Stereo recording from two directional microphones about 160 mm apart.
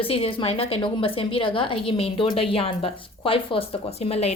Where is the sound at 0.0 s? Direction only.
35° left (ahead or behind).